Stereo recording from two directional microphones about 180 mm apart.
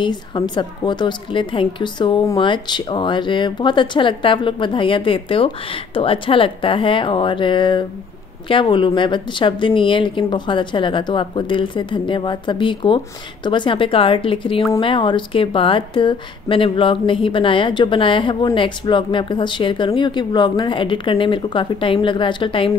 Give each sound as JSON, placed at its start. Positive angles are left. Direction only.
{"t": 0.0, "sound": "speech", "side_deg": 25}